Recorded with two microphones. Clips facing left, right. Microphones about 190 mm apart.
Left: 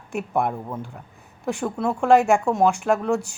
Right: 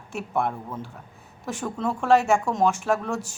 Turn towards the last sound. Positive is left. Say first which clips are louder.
# left 4 dB
turn(degrees=15)  # may be behind; listen again after turning